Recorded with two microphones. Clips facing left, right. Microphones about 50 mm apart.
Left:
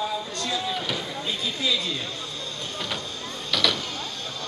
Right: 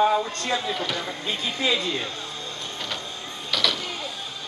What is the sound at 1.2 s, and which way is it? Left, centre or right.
Speech, right.